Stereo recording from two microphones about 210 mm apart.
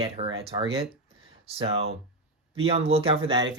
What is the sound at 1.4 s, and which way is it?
Speech, 30° right (ahead or behind).